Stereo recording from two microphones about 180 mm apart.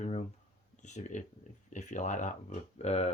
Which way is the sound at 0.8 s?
40° left (ahead or behind).